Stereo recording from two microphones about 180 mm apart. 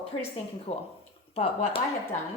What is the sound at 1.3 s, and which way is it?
Speech, 35° left (ahead or behind).